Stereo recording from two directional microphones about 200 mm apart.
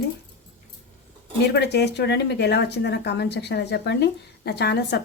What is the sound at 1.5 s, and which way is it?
Speech, 55° left (ahead or behind).